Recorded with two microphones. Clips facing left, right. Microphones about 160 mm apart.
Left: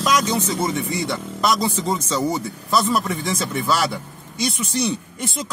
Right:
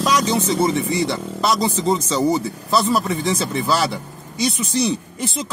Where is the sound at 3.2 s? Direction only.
35° right (ahead or behind).